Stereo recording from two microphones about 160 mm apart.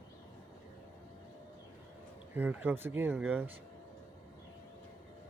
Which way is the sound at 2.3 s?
10° right (ahead or behind).